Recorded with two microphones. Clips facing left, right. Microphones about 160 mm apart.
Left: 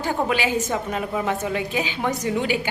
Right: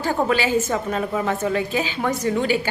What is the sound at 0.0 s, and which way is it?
A woman's voice, 15° left (ahead or behind).